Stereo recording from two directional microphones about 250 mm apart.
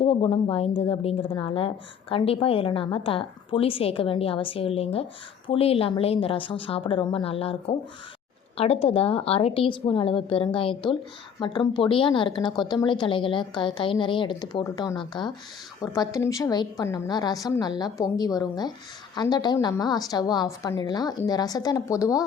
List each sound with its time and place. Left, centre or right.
0.0 s a woman's voice: left